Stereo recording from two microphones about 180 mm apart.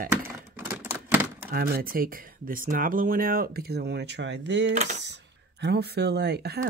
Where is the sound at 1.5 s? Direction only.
55° right (ahead or behind); by 4.7 s 80° right.